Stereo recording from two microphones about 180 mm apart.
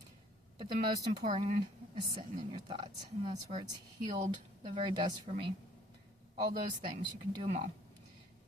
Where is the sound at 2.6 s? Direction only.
25° right (ahead or behind).